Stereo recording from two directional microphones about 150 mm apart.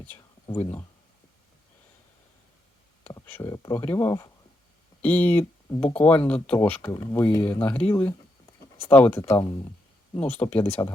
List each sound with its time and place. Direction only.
0.4 s speech: 20° left (ahead or behind)
3.2 s speech: 15° left (ahead or behind)
3.5 s speech: 25° left (ahead or behind)
5.0 s speech: 10° left (ahead or behind)